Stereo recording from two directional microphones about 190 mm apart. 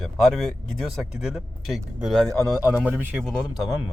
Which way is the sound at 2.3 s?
10° right (ahead or behind).